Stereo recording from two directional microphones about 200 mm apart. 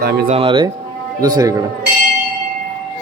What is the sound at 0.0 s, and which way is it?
Speech, 55° right (ahead or behind).